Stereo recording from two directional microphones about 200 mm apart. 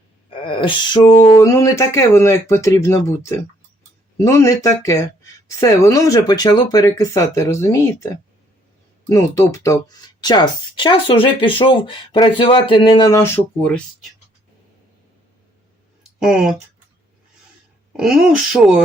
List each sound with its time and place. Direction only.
0.3 s speech: 25° left (ahead or behind); by 14.1 s 5° left (ahead or behind)
16.2 s speech: 5° right (ahead or behind)
17.9 s speech: 5° right (ahead or behind)